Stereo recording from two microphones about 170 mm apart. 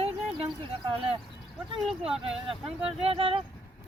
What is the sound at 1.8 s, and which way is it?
Speech, 5° right (ahead or behind).